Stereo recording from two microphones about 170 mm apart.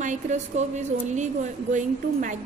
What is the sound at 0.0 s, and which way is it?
A woman's voice, 45° right (ahead or behind).